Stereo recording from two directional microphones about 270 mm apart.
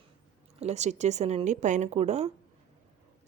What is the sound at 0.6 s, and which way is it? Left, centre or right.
Speech, right.